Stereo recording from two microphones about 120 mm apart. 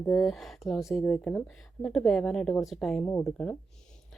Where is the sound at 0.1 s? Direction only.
Centre (ahead or behind).